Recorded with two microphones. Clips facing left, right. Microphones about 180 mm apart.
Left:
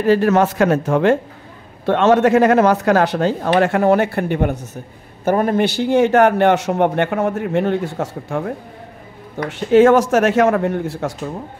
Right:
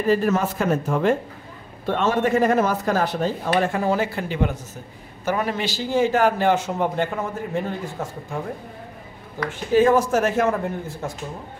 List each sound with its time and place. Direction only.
0.0 s a man's voice: 75° left (ahead or behind)
9.5 s speech: 75° left (ahead or behind)